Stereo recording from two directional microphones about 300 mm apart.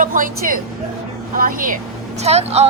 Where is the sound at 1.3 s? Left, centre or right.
Right.